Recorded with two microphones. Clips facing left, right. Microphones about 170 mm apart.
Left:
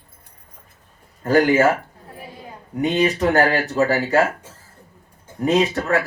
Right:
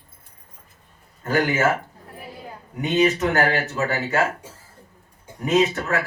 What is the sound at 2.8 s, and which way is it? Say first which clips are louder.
A man's voice: left 1 dB; 35° left (ahead or behind).